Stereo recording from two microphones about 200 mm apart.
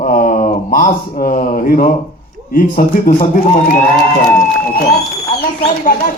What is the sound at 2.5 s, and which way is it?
Speech, 45° left (ahead or behind).